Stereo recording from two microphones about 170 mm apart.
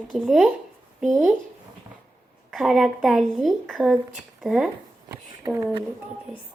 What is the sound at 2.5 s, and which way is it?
A woman's voice, centre (ahead or behind).